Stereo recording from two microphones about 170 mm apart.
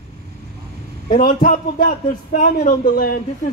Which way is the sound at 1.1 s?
55° left (ahead or behind).